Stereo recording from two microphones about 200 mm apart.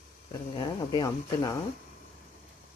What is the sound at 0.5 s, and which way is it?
Speech, 20° left (ahead or behind).